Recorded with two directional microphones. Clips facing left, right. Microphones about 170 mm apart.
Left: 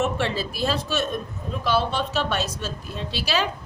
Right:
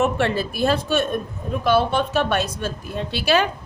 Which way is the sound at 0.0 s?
55° right (ahead or behind).